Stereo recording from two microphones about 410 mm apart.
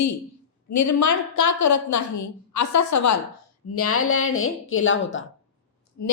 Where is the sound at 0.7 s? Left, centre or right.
Left.